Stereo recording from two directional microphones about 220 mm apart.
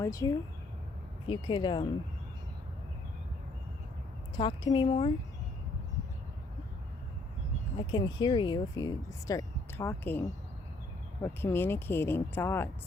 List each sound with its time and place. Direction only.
0.0 s speech: 15° left (ahead or behind)
4.4 s speech: 20° left (ahead or behind)
7.8 s speech: 20° left (ahead or behind)